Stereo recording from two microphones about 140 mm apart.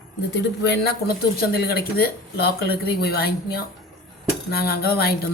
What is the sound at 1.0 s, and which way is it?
Speech, 90° left.